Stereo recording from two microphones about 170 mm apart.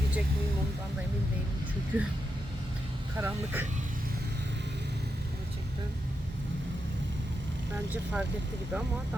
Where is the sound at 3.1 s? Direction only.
10° right (ahead or behind).